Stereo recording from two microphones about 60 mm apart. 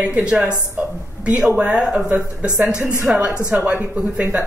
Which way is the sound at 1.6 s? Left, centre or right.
Centre.